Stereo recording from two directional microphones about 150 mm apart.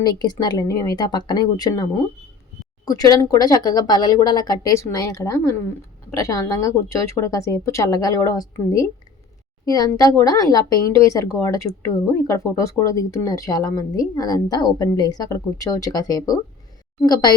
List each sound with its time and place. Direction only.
0.0 s speech: 30° left (ahead or behind)